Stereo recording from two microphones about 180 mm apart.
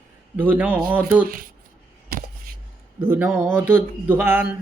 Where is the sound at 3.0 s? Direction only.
10° right (ahead or behind).